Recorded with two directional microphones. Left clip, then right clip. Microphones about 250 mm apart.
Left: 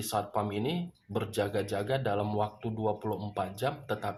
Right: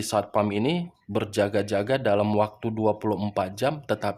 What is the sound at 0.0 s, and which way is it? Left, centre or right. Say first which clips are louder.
Speech: right 8 dB; right.